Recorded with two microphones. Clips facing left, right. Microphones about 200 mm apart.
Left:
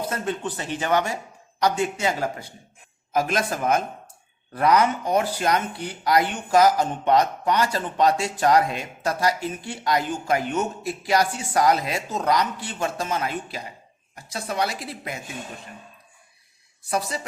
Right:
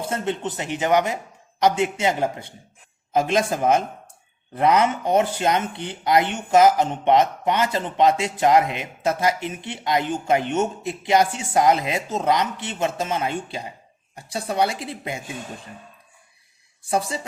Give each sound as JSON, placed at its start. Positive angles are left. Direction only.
{"t": 0.0, "sound": "speech", "side_deg": -25}
{"t": 16.9, "sound": "speech", "side_deg": -30}